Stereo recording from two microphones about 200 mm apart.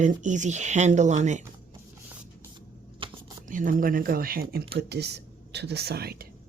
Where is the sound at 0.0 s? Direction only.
40° right (ahead or behind).